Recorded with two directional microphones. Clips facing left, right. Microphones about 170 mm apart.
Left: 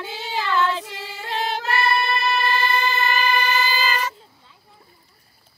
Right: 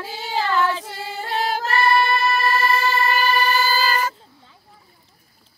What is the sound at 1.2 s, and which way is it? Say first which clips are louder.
Yodeling: right 3 dB; 40° right (ahead or behind).